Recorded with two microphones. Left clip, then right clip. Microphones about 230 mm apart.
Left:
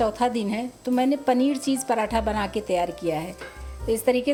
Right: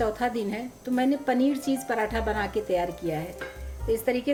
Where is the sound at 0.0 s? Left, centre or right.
Left.